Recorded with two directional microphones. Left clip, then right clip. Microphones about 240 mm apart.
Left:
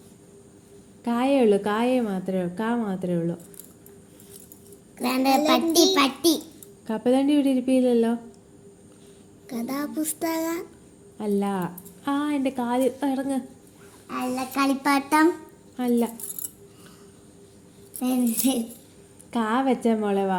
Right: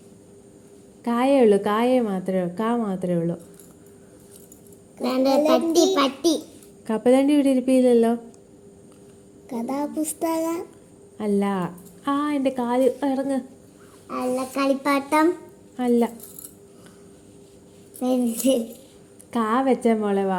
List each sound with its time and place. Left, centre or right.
1.0 s a woman's voice: centre
4.9 s speech: left
6.8 s a woman's voice: centre
9.5 s a woman's voice: centre
14.1 s speech: left
15.7 s speech: centre
18.0 s speech: left
19.3 s a woman's voice: centre